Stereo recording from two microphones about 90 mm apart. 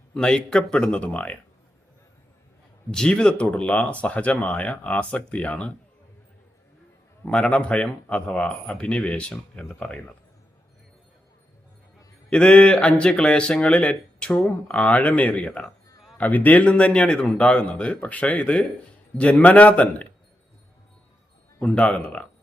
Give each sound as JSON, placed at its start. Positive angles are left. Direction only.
{"t": 0.1, "sound": "speech", "side_deg": 10}
{"t": 2.9, "sound": "speech", "side_deg": 10}
{"t": 7.3, "sound": "speech", "side_deg": 10}
{"t": 12.3, "sound": "speech", "side_deg": 10}
{"t": 21.6, "sound": "speech", "side_deg": 15}